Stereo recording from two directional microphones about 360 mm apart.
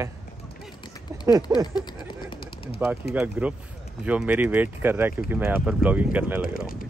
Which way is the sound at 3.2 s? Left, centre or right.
Centre.